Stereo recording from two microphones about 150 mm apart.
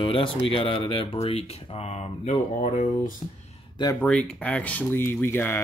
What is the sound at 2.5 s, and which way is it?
Speech, 65° left (ahead or behind).